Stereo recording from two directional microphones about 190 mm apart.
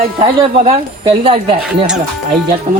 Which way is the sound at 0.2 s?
30° right (ahead or behind).